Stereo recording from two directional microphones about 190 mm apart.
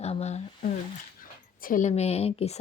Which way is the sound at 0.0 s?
35° left (ahead or behind).